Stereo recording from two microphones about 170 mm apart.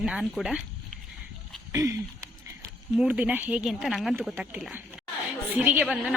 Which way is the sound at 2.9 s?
5° right (ahead or behind).